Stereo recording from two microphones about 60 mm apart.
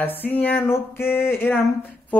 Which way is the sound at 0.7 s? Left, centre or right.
Left.